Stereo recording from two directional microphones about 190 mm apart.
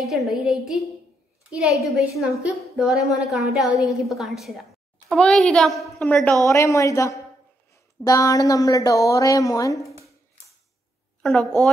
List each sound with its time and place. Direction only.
0.0 s a woman's voice: centre (ahead or behind)
6.4 s speech: 15° left (ahead or behind)
11.2 s a woman's voice: 5° left (ahead or behind)